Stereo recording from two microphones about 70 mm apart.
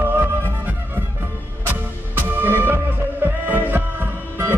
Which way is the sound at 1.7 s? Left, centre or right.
Right.